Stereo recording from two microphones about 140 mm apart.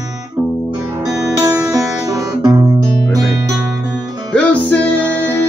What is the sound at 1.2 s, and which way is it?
Music, 20° right (ahead or behind).